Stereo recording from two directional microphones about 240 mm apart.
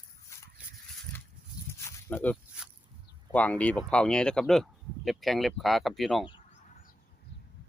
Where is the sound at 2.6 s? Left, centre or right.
Centre.